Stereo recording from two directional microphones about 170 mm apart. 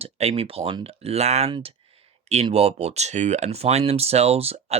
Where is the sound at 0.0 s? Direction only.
35° right (ahead or behind).